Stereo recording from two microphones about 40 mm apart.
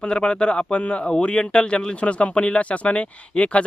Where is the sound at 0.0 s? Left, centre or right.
Left.